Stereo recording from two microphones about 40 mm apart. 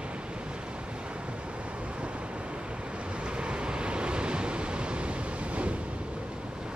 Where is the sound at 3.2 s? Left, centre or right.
Right.